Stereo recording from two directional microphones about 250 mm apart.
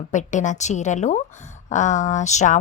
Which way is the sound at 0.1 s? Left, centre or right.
Left.